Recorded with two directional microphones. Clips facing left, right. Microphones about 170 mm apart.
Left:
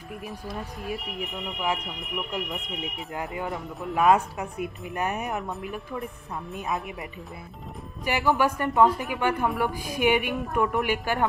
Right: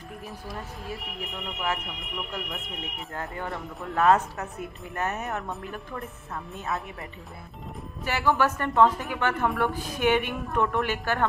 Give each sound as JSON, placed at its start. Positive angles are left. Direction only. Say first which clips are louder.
{"t": 0.6, "sound": "speech", "louder": "left 5 dB", "side_deg": 15}
{"t": 2.3, "sound": "speech", "louder": "left 3 dB", "side_deg": 15}